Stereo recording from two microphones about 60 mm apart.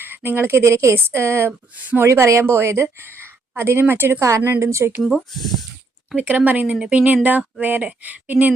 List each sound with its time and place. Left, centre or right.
0.0 s a woman's voice: right
0.9 s a woman's voice: right
4.2 s a woman's voice: right
4.9 s speech: centre
6.1 s speech: right